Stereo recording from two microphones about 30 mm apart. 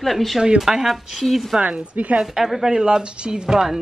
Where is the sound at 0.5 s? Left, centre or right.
Centre.